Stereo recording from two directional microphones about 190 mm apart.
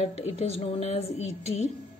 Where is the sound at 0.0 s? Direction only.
35° left (ahead or behind).